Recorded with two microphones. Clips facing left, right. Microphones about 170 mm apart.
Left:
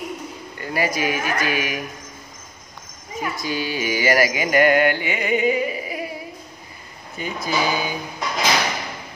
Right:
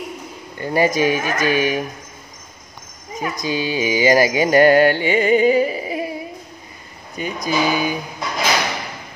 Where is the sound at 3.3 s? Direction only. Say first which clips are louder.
Right 5 dB; 20° right (ahead or behind).